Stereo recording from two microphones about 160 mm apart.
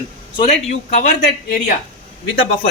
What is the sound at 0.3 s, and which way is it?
Speech, 45° left (ahead or behind).